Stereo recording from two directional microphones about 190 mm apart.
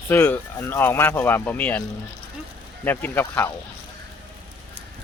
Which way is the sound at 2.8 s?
10° left (ahead or behind).